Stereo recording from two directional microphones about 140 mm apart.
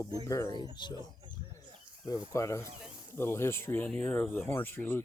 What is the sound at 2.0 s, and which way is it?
Speech, 25° left (ahead or behind).